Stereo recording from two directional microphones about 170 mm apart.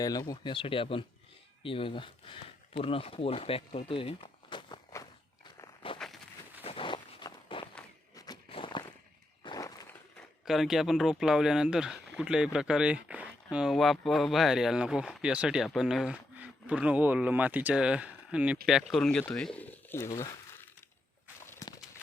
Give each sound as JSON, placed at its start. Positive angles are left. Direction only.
{"t": 0.0, "sound": "speech", "side_deg": 20}
{"t": 5.5, "sound": "walk", "side_deg": 25}
{"t": 6.6, "sound": "a sound", "side_deg": 35}
{"t": 8.1, "sound": "walk", "side_deg": 25}
{"t": 9.4, "sound": "a sound", "side_deg": 25}
{"t": 10.2, "sound": "speech", "side_deg": 0}
{"t": 21.6, "sound": "clip-clop", "side_deg": 20}